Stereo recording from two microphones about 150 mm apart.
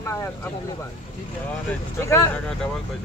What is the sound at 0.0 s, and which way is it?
Speech, 20° left (ahead or behind).